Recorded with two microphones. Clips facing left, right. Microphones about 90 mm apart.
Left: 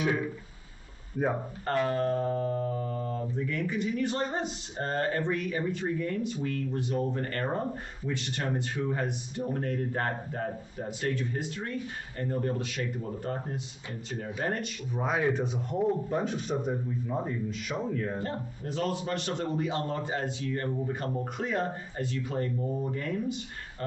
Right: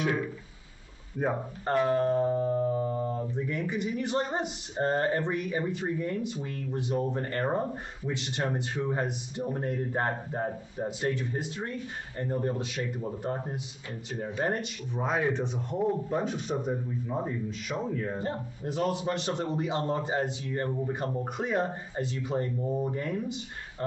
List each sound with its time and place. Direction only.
1.2 s speech: 5° left (ahead or behind)
1.7 s speech: 20° right (ahead or behind)
14.4 s speech: 20° right (ahead or behind)
15.0 s speech: 5° left (ahead or behind)
18.2 s speech: 20° right (ahead or behind)